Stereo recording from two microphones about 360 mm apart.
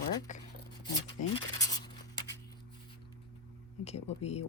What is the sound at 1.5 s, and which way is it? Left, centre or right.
Writing, centre.